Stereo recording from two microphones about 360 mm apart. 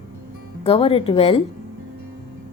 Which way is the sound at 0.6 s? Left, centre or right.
Centre.